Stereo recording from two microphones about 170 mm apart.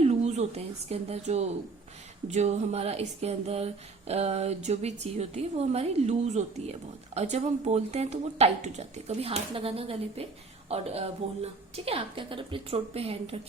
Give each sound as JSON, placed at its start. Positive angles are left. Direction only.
{"t": 0.0, "sound": "speech", "side_deg": -40}